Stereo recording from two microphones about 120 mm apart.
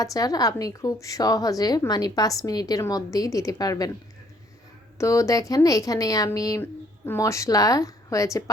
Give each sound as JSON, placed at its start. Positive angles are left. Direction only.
{"t": 0.0, "sound": "a woman's voice", "side_deg": 30}
{"t": 4.9, "sound": "a woman's voice", "side_deg": 25}
{"t": 6.6, "sound": "speech", "side_deg": 20}